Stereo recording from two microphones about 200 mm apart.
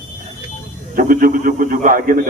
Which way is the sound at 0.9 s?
45° right (ahead or behind).